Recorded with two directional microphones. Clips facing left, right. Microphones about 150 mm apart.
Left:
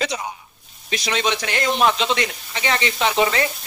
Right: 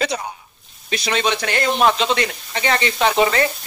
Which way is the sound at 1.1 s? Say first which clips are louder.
Right 2 dB; 45° right (ahead or behind).